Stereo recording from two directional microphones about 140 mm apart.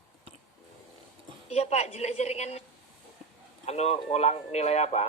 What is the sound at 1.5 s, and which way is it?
A woman's voice, 50° left (ahead or behind).